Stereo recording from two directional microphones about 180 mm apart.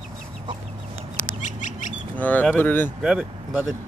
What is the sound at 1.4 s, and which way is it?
Bird, 45° left (ahead or behind).